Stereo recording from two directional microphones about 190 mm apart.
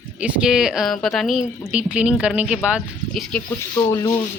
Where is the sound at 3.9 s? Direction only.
15° left (ahead or behind).